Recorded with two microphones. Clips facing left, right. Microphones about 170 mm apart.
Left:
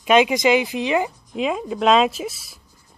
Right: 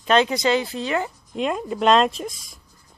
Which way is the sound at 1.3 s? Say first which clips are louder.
Right 1 dB; centre (ahead or behind).